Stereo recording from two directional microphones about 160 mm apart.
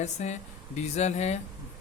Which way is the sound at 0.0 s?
45° left (ahead or behind).